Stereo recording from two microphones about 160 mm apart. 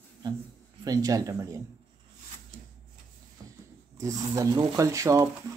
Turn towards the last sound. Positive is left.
turn(degrees=-20)  # may be behind; listen again after turning